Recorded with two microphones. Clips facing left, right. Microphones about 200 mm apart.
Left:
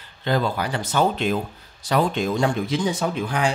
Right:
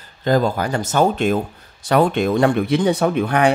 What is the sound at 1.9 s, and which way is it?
Speech, 60° right (ahead or behind).